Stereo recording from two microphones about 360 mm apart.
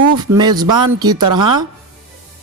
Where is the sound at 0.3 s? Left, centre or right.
Centre.